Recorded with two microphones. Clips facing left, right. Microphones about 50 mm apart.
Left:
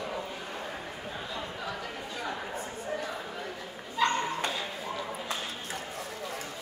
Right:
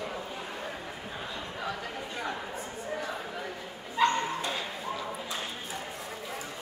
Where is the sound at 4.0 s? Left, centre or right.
Centre.